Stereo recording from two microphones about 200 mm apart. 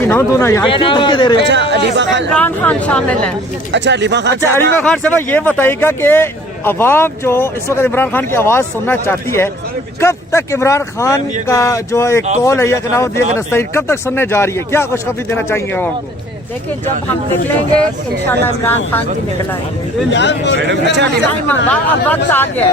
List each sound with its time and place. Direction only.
0.0 s speech: 10° left (ahead or behind)
0.7 s speech: 25° left (ahead or behind)
1.4 s speech: 60° right (ahead or behind)
2.3 s speech: 5° left (ahead or behind)
3.7 s speech: 60° right (ahead or behind)
4.4 s speech: 10° left (ahead or behind)
18.3 s speech: 10° left (ahead or behind)
20.1 s speech: 60° left (ahead or behind)
21.7 s speech: 10° left (ahead or behind)